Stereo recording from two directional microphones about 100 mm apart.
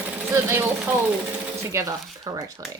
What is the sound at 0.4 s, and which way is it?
Speech, 25° right (ahead or behind).